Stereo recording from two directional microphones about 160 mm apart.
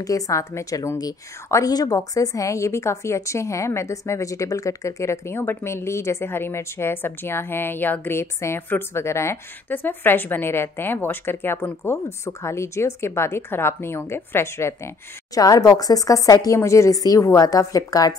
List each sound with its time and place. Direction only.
0.0 s a woman's voice: 20° left (ahead or behind)